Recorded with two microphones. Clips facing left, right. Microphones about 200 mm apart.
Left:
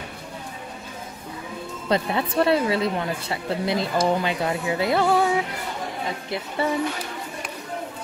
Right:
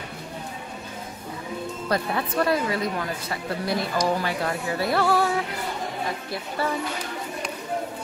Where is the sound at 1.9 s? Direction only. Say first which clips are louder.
Left 3 dB; 25° left (ahead or behind).